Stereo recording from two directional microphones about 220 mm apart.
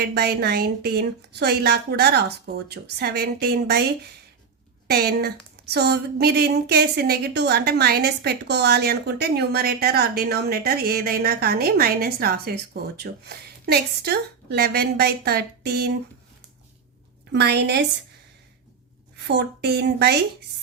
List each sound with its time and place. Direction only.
0.0 s a woman's voice: 45° right (ahead or behind)
4.9 s a woman's voice: 45° right (ahead or behind)
17.3 s a woman's voice: 50° right (ahead or behind)
19.1 s a woman's voice: 50° right (ahead or behind)